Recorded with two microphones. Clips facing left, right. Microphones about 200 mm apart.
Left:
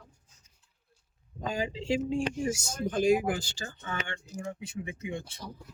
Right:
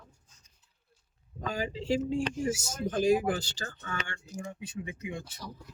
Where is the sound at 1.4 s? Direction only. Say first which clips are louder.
Left 1 dB; 20° left (ahead or behind).